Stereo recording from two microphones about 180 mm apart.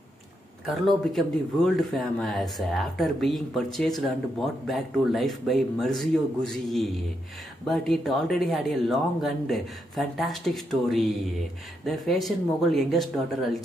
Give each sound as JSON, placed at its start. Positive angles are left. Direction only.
{"t": 0.7, "sound": "speech", "side_deg": 0}